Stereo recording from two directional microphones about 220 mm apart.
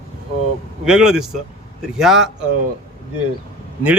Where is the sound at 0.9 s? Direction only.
5° right (ahead or behind).